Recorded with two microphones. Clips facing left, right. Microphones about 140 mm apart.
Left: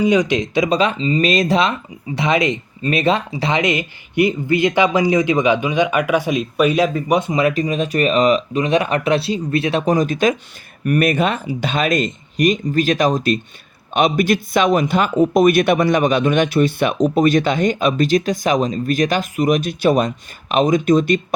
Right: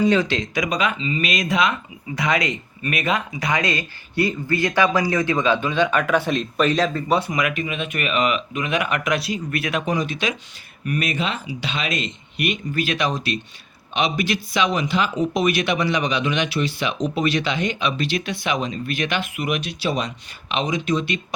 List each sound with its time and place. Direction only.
0.0 s speech: 15° left (ahead or behind); by 1.7 s 35° left (ahead or behind)
2.1 s speech: 25° left (ahead or behind); by 21.2 s 45° left (ahead or behind)